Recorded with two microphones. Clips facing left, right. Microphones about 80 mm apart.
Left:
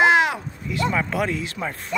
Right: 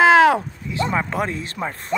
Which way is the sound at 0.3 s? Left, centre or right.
Right.